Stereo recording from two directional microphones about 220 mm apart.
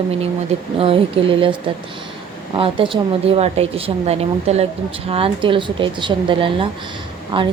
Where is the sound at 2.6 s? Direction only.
25° right (ahead or behind).